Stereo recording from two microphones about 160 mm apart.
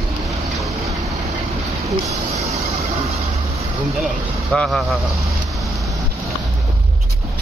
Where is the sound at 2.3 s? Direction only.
40° right (ahead or behind).